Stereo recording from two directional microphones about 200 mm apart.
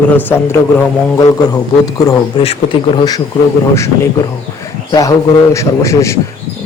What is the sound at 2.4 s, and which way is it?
Speech, 25° left (ahead or behind).